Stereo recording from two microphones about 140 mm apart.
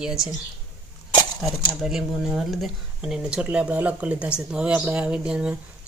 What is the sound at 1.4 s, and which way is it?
Speech, 5° right (ahead or behind).